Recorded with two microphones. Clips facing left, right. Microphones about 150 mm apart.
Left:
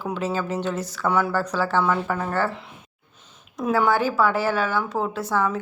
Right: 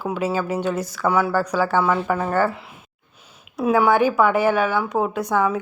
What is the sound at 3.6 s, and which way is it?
Speech, 10° right (ahead or behind).